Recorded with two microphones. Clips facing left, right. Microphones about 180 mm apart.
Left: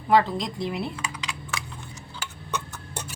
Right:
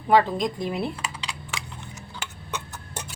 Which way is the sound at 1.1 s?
25° right (ahead or behind).